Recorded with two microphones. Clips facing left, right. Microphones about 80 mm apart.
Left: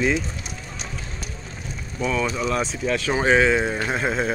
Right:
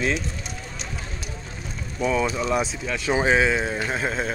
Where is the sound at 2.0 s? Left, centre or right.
Centre.